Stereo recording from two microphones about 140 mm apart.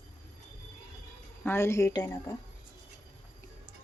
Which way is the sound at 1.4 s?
20° left (ahead or behind).